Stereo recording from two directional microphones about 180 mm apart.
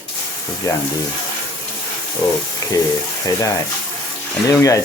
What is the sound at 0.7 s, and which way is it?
Speech, 15° left (ahead or behind).